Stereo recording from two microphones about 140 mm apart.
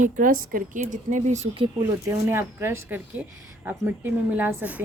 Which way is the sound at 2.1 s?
15° right (ahead or behind).